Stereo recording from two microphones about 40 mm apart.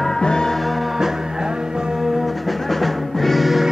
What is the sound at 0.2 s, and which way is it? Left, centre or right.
Music, centre.